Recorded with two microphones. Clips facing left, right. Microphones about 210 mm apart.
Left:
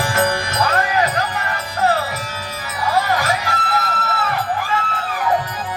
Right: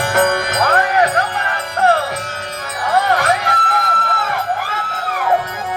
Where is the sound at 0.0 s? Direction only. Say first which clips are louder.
Right 4 dB; 60° right (ahead or behind).